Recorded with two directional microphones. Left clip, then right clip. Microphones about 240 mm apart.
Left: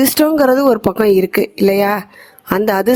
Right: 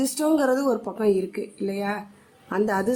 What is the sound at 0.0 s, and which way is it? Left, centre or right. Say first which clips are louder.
A woman's voice: left 10 dB; left.